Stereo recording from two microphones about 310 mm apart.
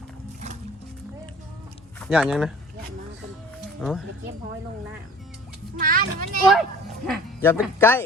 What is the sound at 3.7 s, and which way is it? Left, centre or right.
Speech, centre.